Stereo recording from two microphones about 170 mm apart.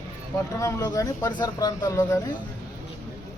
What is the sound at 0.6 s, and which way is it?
Speech, 20° left (ahead or behind).